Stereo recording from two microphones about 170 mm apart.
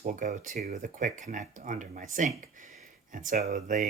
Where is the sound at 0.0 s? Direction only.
55° right (ahead or behind).